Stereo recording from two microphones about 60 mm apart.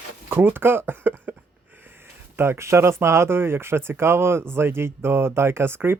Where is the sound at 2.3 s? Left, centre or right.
Right.